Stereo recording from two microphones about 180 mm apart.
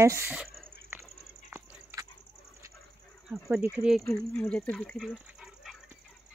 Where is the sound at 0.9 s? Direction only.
10° right (ahead or behind).